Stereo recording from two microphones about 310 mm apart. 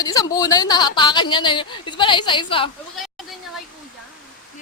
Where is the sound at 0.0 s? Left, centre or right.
Centre.